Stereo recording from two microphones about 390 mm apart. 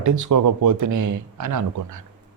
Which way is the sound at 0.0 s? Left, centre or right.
Right.